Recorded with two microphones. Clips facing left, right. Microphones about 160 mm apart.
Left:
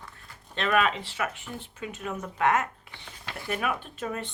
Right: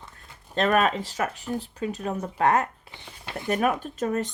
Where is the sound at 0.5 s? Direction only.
40° right (ahead or behind).